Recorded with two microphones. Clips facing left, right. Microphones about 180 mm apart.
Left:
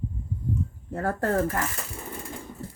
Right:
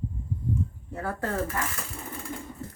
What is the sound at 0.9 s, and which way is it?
Speech, 45° left (ahead or behind).